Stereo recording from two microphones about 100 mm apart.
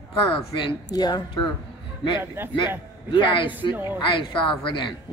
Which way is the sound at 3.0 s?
50° left (ahead or behind).